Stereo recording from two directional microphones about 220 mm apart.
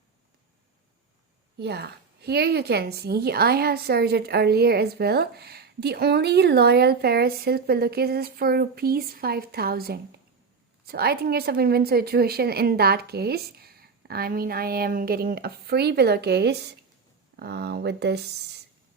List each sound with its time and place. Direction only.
1.5 s a woman's voice: 50° right (ahead or behind)